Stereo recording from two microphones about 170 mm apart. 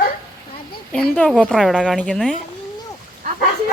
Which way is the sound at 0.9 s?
5° left (ahead or behind).